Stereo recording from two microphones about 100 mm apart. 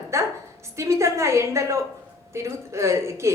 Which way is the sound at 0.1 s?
30° right (ahead or behind).